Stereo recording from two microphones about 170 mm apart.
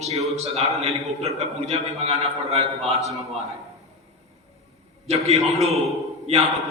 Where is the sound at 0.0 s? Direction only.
40° right (ahead or behind).